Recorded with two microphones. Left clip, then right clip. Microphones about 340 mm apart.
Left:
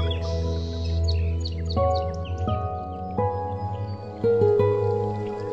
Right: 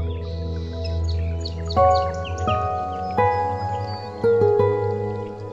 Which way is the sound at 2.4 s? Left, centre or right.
Right.